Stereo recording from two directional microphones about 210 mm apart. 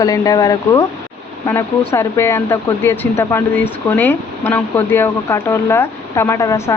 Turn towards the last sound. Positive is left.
turn(degrees=15)  # may be behind; listen again after turning